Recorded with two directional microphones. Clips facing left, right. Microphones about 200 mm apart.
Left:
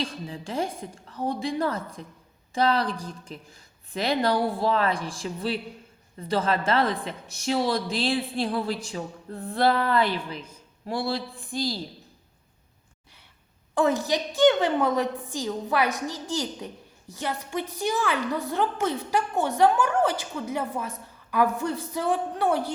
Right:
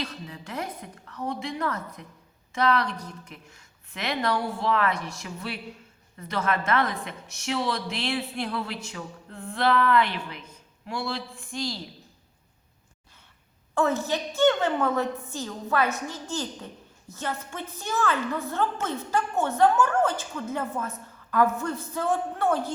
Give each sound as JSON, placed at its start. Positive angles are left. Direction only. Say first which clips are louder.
{"t": 0.0, "sound": "a woman's voice", "louder": "left 4 dB", "side_deg": 30}
{"t": 13.7, "sound": "a woman's voice", "louder": "left 2 dB", "side_deg": 15}